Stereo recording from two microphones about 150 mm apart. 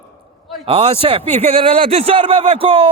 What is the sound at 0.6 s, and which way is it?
A man's voice, 40° right (ahead or behind).